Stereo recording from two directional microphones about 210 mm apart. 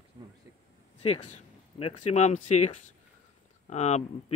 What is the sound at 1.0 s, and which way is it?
A man's voice, 30° left (ahead or behind).